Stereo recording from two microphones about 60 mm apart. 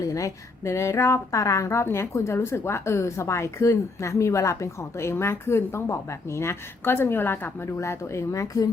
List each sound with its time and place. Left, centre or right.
0.0 s a woman's voice: left
7.6 s speech: left